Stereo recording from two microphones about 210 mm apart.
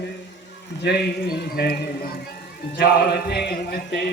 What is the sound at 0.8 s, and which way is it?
A man's voice, 50° left (ahead or behind).